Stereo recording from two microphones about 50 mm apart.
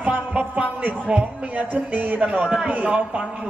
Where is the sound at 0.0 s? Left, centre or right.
Right.